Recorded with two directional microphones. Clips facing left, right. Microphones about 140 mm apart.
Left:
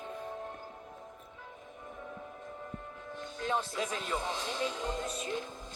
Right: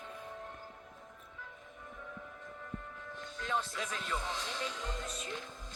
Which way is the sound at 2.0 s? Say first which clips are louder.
Left 4 dB; 30° left (ahead or behind).